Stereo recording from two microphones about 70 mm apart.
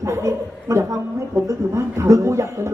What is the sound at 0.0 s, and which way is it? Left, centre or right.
A woman's voice, right.